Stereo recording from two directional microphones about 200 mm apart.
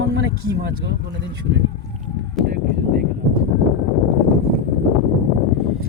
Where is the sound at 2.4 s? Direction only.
Centre (ahead or behind).